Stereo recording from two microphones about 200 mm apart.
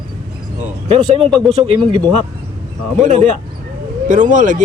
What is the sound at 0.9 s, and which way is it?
Speech, 30° right (ahead or behind).